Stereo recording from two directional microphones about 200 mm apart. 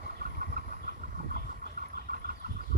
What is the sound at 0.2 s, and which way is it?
Vehicle, 45° right (ahead or behind).